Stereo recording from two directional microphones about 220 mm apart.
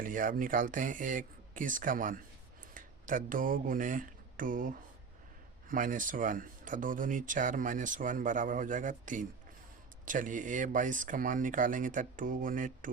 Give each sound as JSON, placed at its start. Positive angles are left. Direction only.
{"t": 0.0, "sound": "speech", "side_deg": -40}